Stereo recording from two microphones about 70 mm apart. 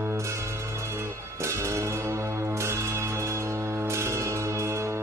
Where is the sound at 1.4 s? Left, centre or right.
Right.